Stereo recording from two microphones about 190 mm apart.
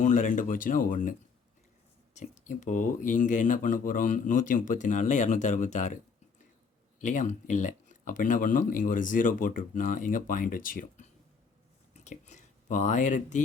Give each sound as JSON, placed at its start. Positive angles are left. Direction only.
{"t": 0.0, "sound": "speech", "side_deg": 40}
{"t": 2.1, "sound": "speech", "side_deg": 40}
{"t": 7.0, "sound": "speech", "side_deg": 40}